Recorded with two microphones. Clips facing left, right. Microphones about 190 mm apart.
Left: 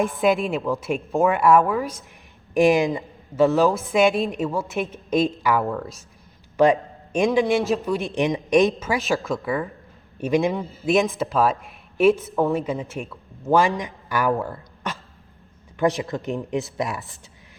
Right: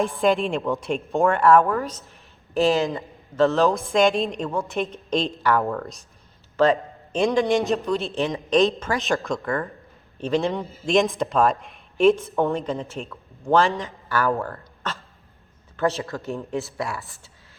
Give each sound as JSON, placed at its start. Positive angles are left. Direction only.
{"t": 0.0, "sound": "a woman's voice", "side_deg": 10}
{"t": 6.6, "sound": "a sound", "side_deg": 15}
{"t": 7.3, "sound": "a woman's voice", "side_deg": 5}